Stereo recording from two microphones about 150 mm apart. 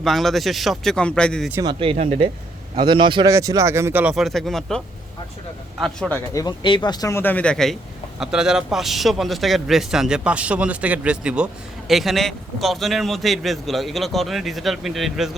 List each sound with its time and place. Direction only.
0.0 s a man's voice: centre (ahead or behind)
1.6 s speech: 35° right (ahead or behind)
3.2 s speech: 20° right (ahead or behind)
4.1 s a man's voice: centre (ahead or behind)
5.8 s a man's voice: 5° left (ahead or behind)
6.3 s a man's voice: 30° left (ahead or behind); by 15.4 s centre (ahead or behind)